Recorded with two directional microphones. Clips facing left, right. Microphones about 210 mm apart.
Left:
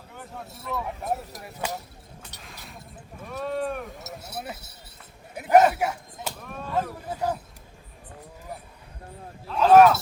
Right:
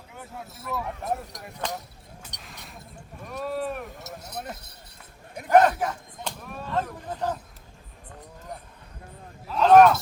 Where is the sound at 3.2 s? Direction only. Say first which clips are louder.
Left 1 dB; centre (ahead or behind).